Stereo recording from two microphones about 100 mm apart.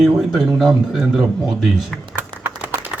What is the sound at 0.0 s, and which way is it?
A man's voice, 5° right (ahead or behind).